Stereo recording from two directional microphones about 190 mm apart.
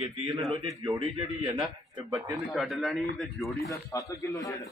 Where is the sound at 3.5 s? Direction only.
15° left (ahead or behind).